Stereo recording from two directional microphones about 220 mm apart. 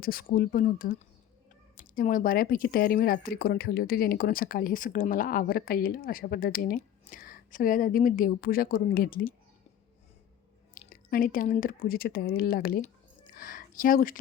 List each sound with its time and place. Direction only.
0.0 s speech: 40° left (ahead or behind)
10.8 s speech: 40° left (ahead or behind)